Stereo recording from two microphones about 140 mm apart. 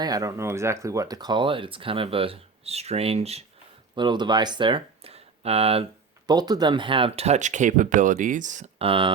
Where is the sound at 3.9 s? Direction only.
35° right (ahead or behind).